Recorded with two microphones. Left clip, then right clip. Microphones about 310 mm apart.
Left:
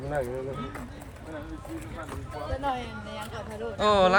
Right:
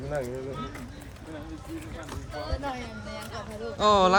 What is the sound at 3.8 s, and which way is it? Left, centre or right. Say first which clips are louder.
Speech: right 1 dB; centre.